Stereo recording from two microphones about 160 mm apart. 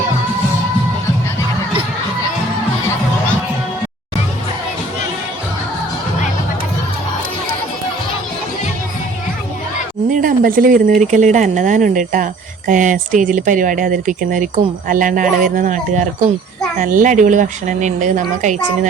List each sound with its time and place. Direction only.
10.1 s a woman's voice: 55° right (ahead or behind)